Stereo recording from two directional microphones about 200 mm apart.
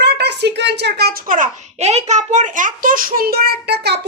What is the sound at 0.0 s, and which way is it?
A child's voice, 55° right (ahead or behind).